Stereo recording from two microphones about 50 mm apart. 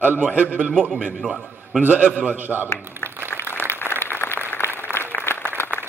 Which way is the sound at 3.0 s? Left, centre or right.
Right.